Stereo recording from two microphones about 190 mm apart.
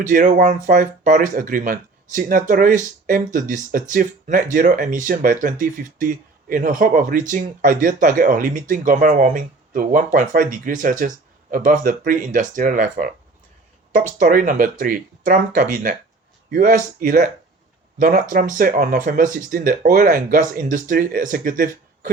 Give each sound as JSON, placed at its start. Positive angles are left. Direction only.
{"t": 0.0, "sound": "speech", "side_deg": -45}